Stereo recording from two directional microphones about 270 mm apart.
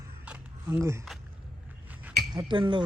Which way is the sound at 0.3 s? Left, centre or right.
Centre.